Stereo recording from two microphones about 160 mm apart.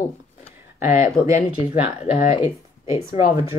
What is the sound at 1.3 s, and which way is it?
Speech, 50° left (ahead or behind).